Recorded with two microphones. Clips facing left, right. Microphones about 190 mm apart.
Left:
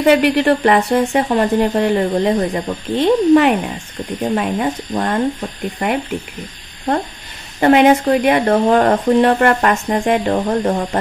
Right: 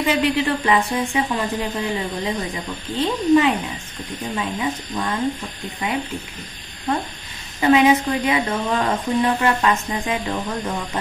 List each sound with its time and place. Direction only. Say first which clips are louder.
0.0 s speech: left 7 dB; 60° left (ahead or behind)
7.6 s speech: left 5 dB; 60° left (ahead or behind)
10.2 s speech: left 9 dB; 50° left (ahead or behind)